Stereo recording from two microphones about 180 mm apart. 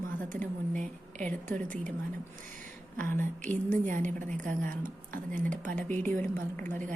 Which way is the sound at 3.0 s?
10° left (ahead or behind).